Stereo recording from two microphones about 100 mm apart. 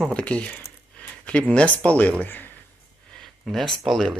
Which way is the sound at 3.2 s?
5° left (ahead or behind).